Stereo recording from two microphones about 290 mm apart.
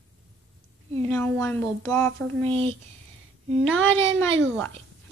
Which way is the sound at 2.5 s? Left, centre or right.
Centre.